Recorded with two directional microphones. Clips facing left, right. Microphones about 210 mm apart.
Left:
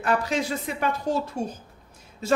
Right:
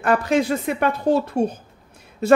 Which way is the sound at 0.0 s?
55° right (ahead or behind).